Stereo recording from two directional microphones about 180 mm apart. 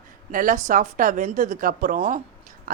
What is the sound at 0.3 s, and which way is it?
Speech, 50° right (ahead or behind).